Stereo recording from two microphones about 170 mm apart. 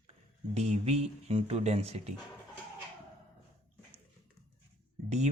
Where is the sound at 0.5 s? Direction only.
40° right (ahead or behind).